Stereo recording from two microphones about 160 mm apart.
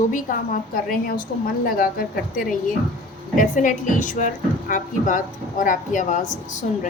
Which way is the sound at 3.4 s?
55° left (ahead or behind).